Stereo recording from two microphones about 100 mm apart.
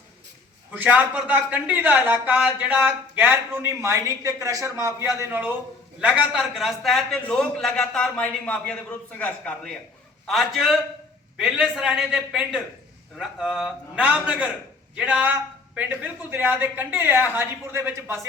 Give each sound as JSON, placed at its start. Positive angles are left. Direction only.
{"t": 0.7, "sound": "a man's voice", "side_deg": -15}
{"t": 6.0, "sound": "a man's voice", "side_deg": -10}
{"t": 10.2, "sound": "a man's voice", "side_deg": 0}